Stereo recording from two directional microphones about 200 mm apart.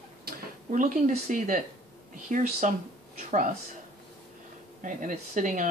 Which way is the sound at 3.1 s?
40° right (ahead or behind).